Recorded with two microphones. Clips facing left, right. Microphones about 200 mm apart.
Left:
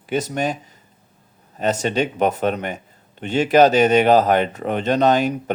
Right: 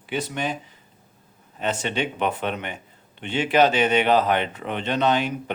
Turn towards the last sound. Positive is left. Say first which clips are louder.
# left 5 dB
turn(degrees=40)  # may be behind; listen again after turning